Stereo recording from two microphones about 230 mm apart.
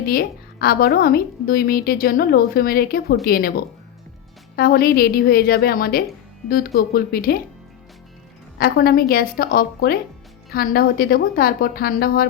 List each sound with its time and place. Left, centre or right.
0.0 s a woman's voice: left
8.5 s a woman's voice: left